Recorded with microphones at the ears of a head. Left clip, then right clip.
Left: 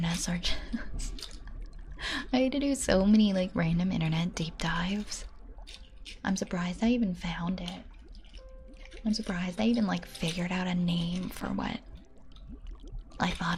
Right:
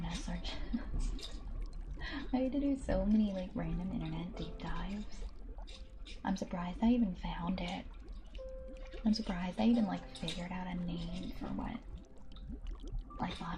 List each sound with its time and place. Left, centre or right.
0.0 s whispering: left
2.0 s a woman's voice: left
9.3 s a woman's voice: left
13.1 s a woman's voice: left